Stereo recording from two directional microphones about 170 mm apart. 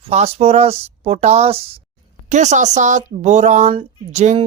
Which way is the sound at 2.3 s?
45° right (ahead or behind).